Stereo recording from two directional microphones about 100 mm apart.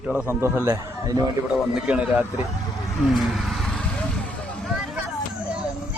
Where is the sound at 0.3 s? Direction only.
25° right (ahead or behind).